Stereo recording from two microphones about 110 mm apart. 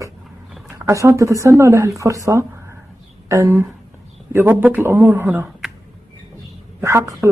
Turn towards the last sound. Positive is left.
turn(degrees=-25)  # may be behind; listen again after turning